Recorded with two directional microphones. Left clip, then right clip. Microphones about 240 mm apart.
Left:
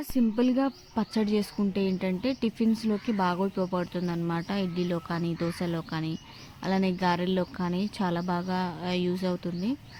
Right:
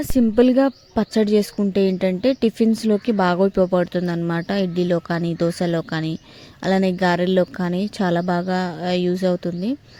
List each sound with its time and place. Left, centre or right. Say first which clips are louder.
0.0 s speech: right 11 dB; right